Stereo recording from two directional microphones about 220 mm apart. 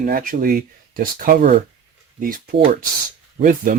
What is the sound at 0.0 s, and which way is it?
Speech, 40° right (ahead or behind).